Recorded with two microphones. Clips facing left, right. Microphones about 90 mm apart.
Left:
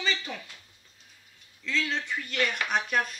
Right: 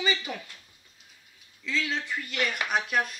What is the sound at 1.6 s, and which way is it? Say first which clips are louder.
Speech: even; centre (ahead or behind).